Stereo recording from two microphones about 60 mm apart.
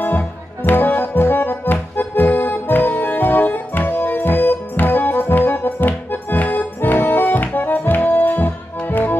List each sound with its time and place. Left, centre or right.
0.7 s accordion: left